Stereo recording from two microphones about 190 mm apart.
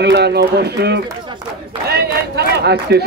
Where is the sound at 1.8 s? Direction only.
55° right (ahead or behind).